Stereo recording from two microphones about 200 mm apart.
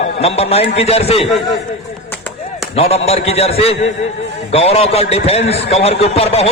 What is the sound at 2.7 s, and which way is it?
A man's voice, 30° left (ahead or behind).